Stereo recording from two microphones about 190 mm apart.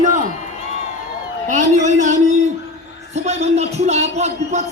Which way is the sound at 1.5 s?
40° right (ahead or behind).